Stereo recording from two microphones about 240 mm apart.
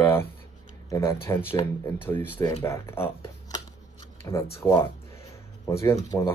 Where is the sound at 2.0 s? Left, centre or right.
Centre.